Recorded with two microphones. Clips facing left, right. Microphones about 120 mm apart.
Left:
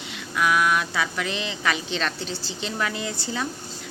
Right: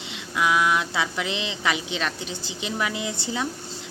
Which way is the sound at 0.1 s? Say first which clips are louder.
Even; 20° right (ahead or behind).